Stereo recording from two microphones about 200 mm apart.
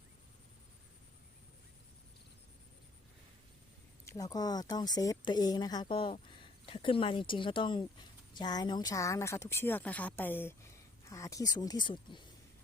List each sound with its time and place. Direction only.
4.0 s speech: 15° left (ahead or behind)